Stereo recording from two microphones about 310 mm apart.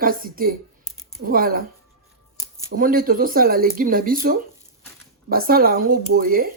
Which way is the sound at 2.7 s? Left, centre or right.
Right.